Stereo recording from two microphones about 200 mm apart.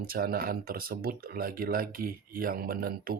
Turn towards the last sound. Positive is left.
turn(degrees=-45)  # may be behind; listen again after turning